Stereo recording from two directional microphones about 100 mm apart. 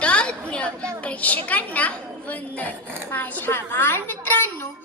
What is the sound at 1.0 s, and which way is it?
A woman's voice, 15° left (ahead or behind).